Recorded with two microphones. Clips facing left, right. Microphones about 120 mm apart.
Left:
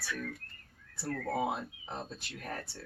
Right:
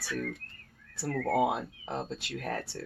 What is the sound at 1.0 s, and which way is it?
Speech, 80° right.